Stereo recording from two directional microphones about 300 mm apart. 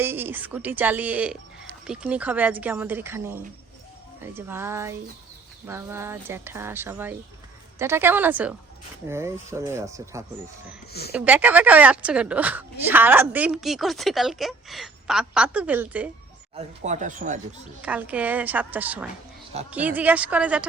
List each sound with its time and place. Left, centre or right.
0.0 s a woman's voice: centre
16.6 s speech: right
17.8 s a woman's voice: centre